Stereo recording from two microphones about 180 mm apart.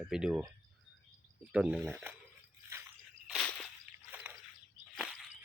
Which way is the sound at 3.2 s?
Centre (ahead or behind).